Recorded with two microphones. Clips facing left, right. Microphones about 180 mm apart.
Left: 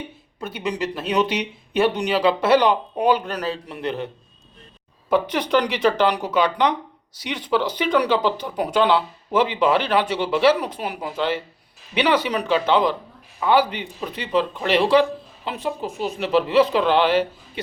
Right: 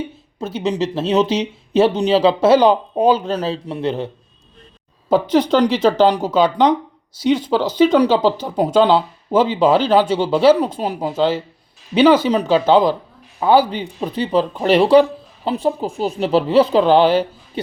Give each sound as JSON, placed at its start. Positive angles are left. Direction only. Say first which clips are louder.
{"t": 0.3, "sound": "speech", "louder": "right 6 dB", "side_deg": -25}